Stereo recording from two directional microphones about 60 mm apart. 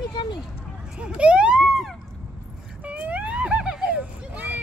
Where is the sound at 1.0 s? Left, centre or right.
Centre.